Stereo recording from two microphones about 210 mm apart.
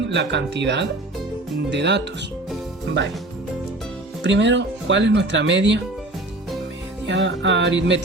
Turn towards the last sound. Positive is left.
turn(degrees=-60)  # may be behind; listen again after turning